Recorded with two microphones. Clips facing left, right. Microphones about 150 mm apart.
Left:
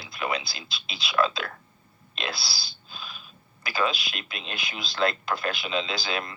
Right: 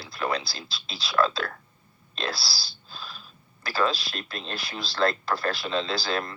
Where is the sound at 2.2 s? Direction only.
20° left (ahead or behind).